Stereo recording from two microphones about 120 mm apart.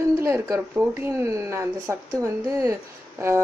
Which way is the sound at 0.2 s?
20° right (ahead or behind).